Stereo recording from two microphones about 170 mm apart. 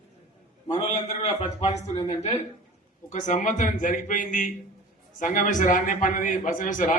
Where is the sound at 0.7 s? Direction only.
35° left (ahead or behind).